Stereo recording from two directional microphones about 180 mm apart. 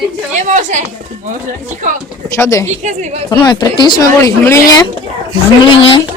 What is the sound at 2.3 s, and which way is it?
Speech, 15° left (ahead or behind).